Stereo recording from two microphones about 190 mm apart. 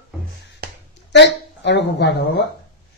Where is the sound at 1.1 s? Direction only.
65° left (ahead or behind).